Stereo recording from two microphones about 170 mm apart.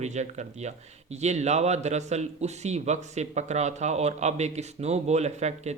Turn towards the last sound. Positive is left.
turn(degrees=-40)  # may be behind; listen again after turning